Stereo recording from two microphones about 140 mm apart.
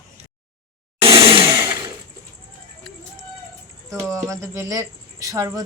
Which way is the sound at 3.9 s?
20° right (ahead or behind).